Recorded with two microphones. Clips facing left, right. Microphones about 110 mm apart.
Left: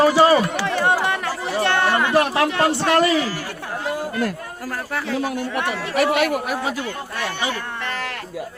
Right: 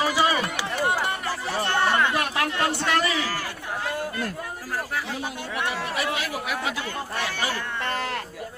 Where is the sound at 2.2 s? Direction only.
30° left (ahead or behind).